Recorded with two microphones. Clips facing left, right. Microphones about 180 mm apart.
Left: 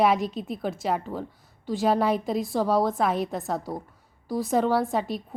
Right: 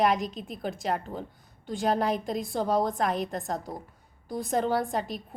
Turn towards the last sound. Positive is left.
turn(degrees=0)  # may be behind; listen again after turning